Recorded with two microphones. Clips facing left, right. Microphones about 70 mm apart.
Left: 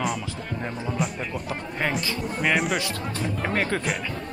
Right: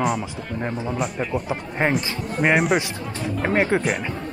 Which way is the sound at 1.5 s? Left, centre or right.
Right.